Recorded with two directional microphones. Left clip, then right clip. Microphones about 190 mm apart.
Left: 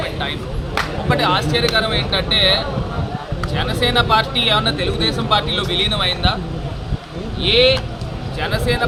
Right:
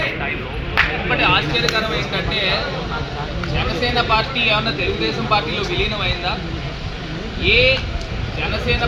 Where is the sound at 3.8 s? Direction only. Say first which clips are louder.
Left 3 dB; 15° left (ahead or behind).